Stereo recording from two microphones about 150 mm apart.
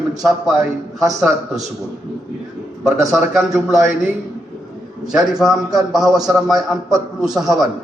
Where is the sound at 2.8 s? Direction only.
Centre (ahead or behind).